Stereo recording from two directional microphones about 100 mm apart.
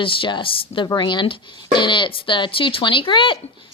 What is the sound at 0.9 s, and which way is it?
Speech, 50° left (ahead or behind).